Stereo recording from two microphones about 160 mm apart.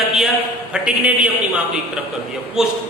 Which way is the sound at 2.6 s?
5° right (ahead or behind).